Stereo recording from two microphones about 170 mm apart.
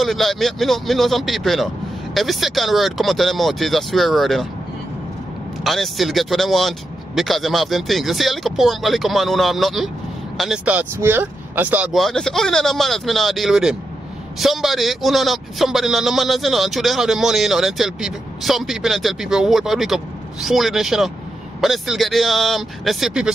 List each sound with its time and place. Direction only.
0.0 s a man's voice: centre (ahead or behind)
5.6 s a man's voice: centre (ahead or behind)